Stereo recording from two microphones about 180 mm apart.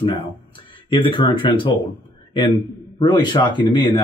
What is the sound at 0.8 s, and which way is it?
Speech, 30° left (ahead or behind).